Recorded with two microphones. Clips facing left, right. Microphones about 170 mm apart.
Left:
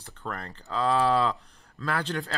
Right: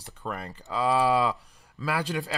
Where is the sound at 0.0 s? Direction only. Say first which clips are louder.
Right 2 dB; 10° right (ahead or behind).